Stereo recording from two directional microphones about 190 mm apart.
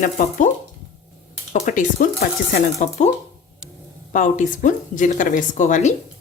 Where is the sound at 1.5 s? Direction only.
40° left (ahead or behind).